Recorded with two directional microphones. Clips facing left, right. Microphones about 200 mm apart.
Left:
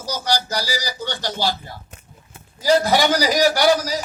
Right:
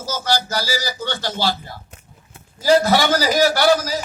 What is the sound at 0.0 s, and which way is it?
A man's voice, 15° left (ahead or behind).